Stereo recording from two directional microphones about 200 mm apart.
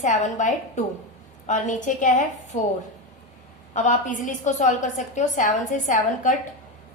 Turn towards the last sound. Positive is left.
turn(degrees=40)  # may be behind; listen again after turning